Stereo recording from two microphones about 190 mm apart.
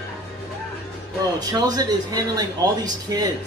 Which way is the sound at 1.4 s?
20° right (ahead or behind).